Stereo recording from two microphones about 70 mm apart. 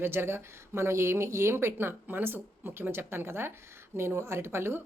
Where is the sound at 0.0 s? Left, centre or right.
Right.